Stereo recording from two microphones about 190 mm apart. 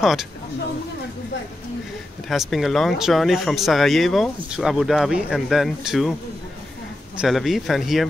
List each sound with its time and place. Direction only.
0.0 s speech: centre (ahead or behind)
2.2 s speech: centre (ahead or behind)
7.2 s speech: centre (ahead or behind)